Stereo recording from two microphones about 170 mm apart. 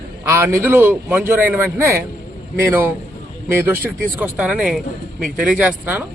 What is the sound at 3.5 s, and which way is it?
Speech, 15° right (ahead or behind).